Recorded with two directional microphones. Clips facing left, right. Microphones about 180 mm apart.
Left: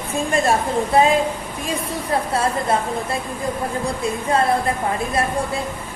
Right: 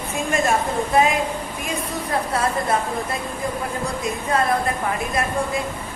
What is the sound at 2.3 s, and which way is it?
Speech, 25° left (ahead or behind).